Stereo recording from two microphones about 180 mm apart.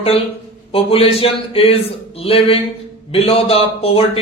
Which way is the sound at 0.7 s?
30° left (ahead or behind).